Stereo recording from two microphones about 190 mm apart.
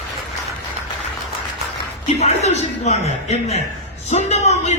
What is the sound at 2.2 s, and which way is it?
A man's voice, 35° left (ahead or behind).